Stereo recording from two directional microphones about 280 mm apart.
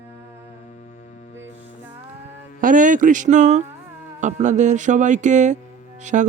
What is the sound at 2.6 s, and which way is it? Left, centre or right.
Speech, right.